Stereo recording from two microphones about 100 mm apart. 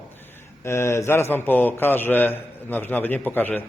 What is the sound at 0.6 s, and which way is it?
A man's voice, 25° left (ahead or behind).